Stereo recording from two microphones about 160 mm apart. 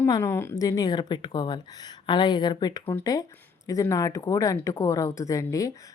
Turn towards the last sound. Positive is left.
turn(degrees=20)  # may be behind; listen again after turning